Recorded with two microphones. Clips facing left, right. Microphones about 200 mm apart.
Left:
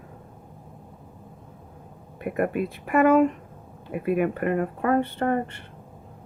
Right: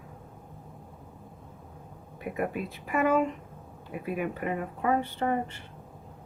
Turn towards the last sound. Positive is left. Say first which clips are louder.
# left 4 dB
turn(degrees=60)  # may be behind; listen again after turning